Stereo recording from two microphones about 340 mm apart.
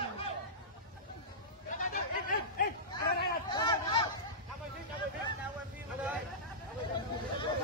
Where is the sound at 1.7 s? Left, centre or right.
Left.